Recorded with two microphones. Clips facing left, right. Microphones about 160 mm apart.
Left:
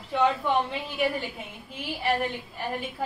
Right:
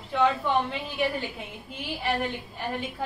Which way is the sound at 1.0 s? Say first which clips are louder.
Left 1 dB; centre (ahead or behind).